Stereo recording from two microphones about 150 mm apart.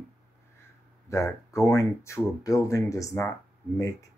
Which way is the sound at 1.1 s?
20° left (ahead or behind).